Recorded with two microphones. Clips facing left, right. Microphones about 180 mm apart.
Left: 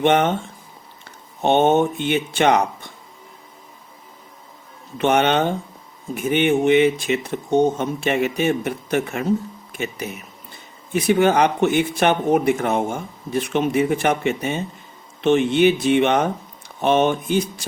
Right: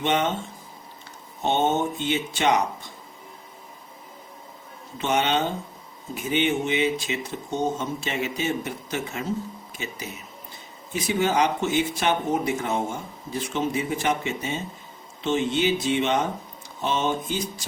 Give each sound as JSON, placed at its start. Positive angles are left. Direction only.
{"t": 0.0, "sound": "speech", "side_deg": 55}
{"t": 1.4, "sound": "speech", "side_deg": 60}
{"t": 4.9, "sound": "speech", "side_deg": 60}